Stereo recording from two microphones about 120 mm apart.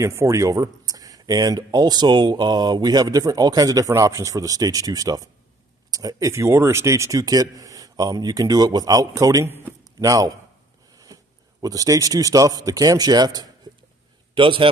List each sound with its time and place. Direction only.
0.0 s speech: 25° right (ahead or behind)
9.9 s speech: 30° right (ahead or behind)
11.6 s speech: 30° right (ahead or behind)
14.3 s a man's voice: 45° right (ahead or behind)